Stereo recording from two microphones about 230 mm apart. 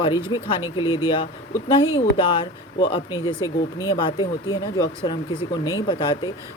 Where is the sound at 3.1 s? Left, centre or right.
Centre.